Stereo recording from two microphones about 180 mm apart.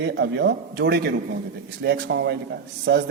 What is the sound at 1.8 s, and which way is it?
Speech, 75° right (ahead or behind).